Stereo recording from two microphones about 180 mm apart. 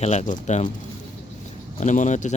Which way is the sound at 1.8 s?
40° left (ahead or behind).